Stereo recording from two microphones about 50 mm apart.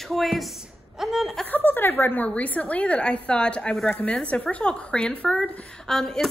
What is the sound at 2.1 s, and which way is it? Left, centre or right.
A woman's voice, left.